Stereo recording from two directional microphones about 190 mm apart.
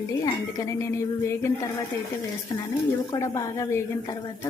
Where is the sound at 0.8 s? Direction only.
15° left (ahead or behind).